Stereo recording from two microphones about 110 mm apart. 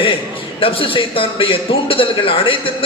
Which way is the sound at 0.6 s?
55° left (ahead or behind).